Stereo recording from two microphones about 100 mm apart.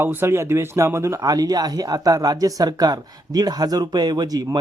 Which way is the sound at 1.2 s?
40° right (ahead or behind).